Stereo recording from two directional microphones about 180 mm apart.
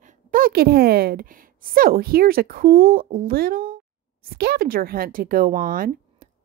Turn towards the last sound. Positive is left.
turn(degrees=-50)  # may be behind; listen again after turning